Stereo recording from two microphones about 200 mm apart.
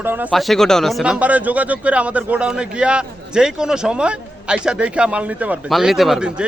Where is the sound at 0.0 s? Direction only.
10° right (ahead or behind).